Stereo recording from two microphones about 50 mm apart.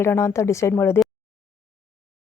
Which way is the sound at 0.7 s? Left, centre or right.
Left.